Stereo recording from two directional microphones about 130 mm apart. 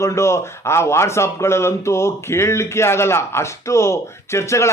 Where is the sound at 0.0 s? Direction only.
20° left (ahead or behind).